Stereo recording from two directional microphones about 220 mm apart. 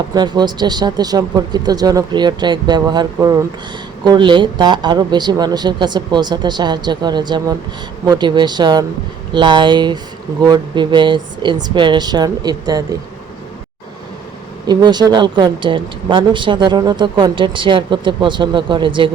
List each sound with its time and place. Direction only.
0.1 s speech: 20° right (ahead or behind)
14.7 s speech: 20° right (ahead or behind)